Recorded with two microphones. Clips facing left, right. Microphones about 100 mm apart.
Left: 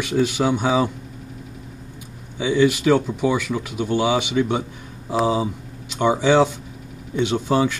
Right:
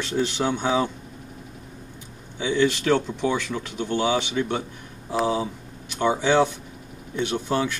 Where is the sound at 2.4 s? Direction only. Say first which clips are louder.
Left 4 dB; 10° left (ahead or behind).